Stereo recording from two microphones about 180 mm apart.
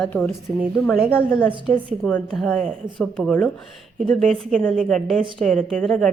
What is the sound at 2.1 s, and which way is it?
Speech, 5° left (ahead or behind).